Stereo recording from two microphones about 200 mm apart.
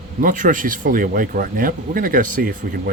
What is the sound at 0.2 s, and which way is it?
Speech, 40° right (ahead or behind).